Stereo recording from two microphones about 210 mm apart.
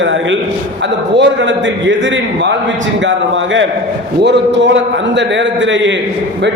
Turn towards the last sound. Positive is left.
turn(degrees=-60)  # may be behind; listen again after turning